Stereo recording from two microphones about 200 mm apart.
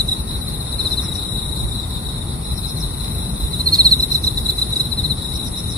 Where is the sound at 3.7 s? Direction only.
15° right (ahead or behind).